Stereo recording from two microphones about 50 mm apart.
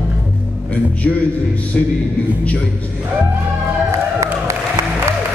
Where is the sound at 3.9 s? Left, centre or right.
Right.